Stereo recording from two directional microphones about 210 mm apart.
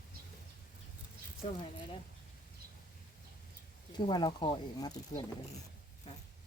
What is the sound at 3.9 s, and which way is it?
Speech, 20° left (ahead or behind).